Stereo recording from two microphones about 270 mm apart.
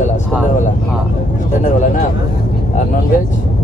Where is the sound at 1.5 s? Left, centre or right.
Left.